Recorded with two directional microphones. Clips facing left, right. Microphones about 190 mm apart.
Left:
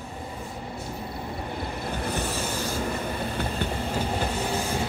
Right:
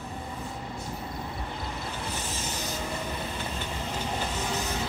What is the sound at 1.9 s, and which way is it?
Vehicle, 55° left (ahead or behind).